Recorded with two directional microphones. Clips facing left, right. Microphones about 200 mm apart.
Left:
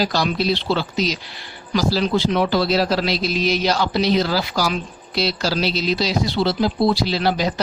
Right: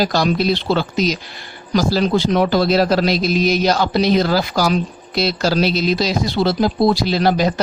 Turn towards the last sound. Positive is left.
turn(degrees=-50)  # may be behind; listen again after turning